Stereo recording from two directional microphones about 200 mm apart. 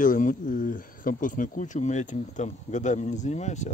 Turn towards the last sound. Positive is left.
turn(degrees=35)  # may be behind; listen again after turning